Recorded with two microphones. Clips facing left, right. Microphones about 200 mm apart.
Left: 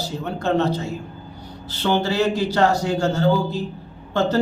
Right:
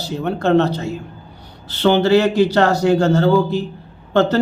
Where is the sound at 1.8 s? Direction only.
70° right (ahead or behind).